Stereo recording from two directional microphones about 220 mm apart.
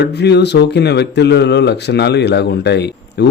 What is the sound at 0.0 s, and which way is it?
A man's voice, 50° left (ahead or behind).